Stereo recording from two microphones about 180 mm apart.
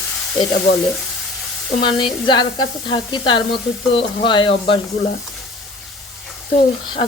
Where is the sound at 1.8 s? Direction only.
25° left (ahead or behind).